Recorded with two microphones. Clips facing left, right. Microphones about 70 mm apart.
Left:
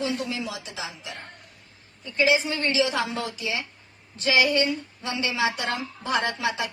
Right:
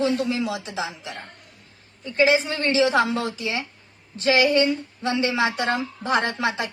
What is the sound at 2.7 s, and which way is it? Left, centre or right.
Speech, right.